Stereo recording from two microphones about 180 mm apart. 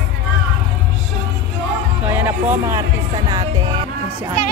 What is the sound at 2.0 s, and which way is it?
Speech, 10° right (ahead or behind).